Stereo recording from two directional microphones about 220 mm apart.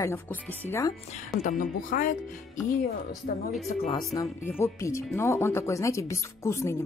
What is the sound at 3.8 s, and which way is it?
Speech, 20° left (ahead or behind).